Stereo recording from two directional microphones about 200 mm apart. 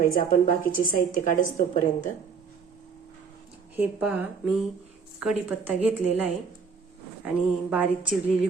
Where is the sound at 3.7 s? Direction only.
5° right (ahead or behind).